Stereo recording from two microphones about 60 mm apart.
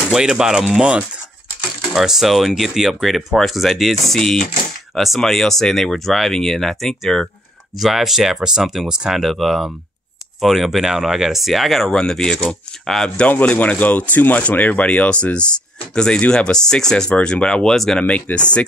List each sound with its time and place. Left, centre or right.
0.1 s speech: centre
4.2 s speech: centre
7.8 s speech: centre
11.9 s speech: centre
13.3 s speech: left; by 18.0 s centre
18.0 s speech: left